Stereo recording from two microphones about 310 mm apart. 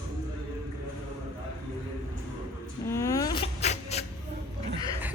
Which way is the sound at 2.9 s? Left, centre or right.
Centre.